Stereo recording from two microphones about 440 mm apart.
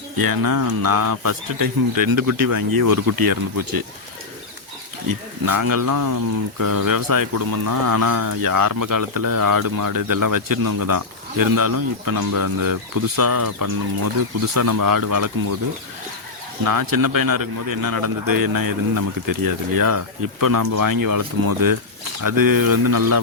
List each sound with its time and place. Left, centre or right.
0.2 s speech: right
5.0 s speech: right
16.6 s speech: right